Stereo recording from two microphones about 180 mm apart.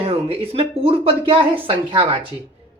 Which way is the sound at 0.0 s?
30° right (ahead or behind).